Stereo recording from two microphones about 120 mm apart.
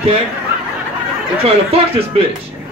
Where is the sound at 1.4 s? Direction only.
55° right (ahead or behind).